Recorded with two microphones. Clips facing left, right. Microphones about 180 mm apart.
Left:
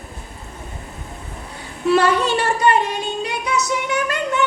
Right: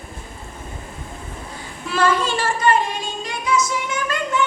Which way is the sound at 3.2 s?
65° left (ahead or behind).